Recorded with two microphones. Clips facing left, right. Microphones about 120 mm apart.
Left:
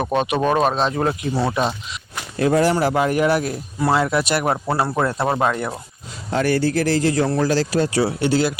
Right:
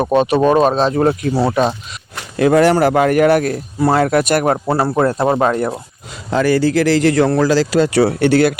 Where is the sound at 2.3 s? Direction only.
80° right; by 4.6 s 45° right (ahead or behind).